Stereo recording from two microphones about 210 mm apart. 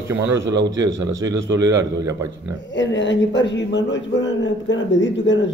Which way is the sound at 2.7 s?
60° left (ahead or behind).